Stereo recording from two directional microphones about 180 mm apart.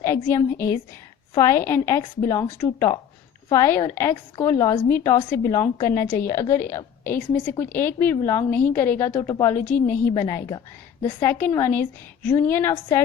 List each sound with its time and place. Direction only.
0.0 s a woman's voice: 15° left (ahead or behind)